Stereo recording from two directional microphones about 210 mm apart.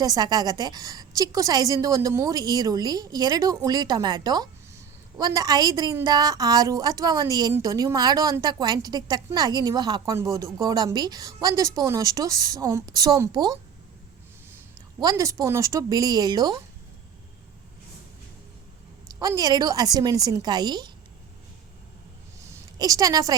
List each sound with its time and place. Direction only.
0.0 s speech: 20° right (ahead or behind)
14.9 s speech: 15° right (ahead or behind)
19.2 s speech: 15° right (ahead or behind)
22.4 s a sound: 15° right (ahead or behind)